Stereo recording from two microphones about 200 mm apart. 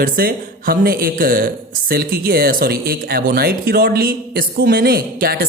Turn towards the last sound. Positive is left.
turn(degrees=-50)  # may be behind; listen again after turning